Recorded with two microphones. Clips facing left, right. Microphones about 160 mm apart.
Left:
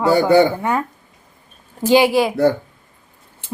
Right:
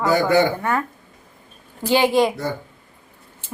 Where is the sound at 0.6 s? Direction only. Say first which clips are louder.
Left 2 dB; 15° left (ahead or behind).